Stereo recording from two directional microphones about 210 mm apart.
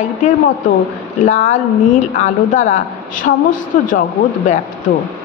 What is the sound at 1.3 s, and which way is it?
Speech, 35° left (ahead or behind).